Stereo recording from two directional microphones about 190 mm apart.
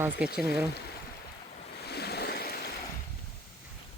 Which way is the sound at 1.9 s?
60° left (ahead or behind).